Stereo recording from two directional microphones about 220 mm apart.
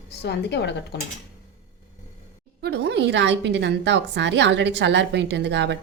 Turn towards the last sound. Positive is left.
turn(degrees=-55)  # may be behind; listen again after turning